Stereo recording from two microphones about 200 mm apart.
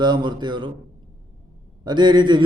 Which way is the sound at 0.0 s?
20° right (ahead or behind).